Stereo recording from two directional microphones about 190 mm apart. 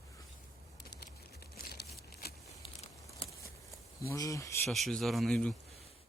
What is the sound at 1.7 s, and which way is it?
Crumpling, 55° left (ahead or behind).